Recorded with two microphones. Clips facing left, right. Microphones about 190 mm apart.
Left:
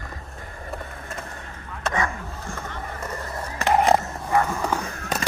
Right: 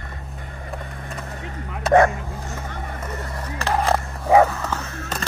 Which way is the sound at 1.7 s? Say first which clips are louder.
Right 11 dB; 60° right (ahead or behind).